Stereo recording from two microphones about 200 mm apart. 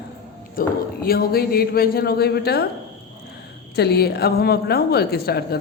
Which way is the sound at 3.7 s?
55° left (ahead or behind).